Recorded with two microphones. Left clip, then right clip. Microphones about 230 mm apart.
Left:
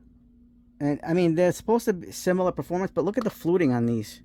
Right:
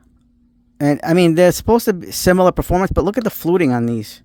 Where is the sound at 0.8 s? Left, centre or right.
Right.